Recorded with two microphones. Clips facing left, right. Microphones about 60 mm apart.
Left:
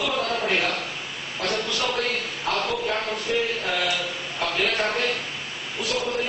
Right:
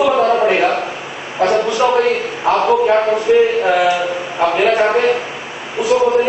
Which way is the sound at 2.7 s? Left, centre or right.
Right.